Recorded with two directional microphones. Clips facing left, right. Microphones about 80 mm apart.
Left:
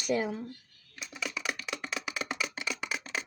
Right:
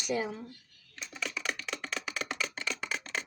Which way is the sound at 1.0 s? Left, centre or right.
Centre.